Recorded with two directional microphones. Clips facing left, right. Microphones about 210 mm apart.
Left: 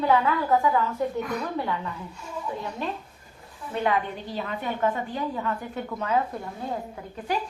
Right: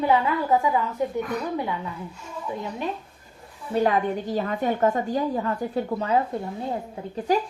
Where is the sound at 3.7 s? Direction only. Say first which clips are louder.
Right 4 dB; 40° right (ahead or behind).